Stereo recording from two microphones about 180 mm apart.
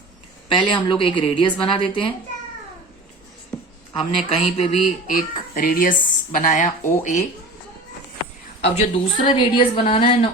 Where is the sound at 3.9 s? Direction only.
30° left (ahead or behind).